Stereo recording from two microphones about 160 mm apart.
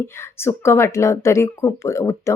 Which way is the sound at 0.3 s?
15° left (ahead or behind).